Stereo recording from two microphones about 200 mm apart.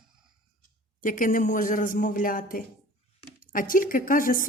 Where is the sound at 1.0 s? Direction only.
40° left (ahead or behind).